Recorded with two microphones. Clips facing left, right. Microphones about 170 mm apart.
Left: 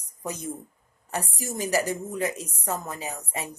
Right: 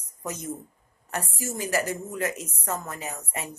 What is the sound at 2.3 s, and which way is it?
Speech, 35° left (ahead or behind).